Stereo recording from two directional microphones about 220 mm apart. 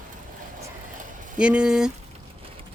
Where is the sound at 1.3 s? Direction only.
5° right (ahead or behind).